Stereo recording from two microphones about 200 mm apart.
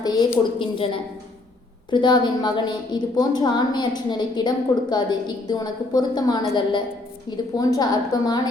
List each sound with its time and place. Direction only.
0.0 s a woman's voice: 20° left (ahead or behind)